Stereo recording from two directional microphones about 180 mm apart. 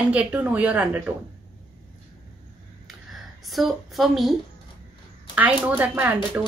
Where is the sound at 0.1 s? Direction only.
10° right (ahead or behind).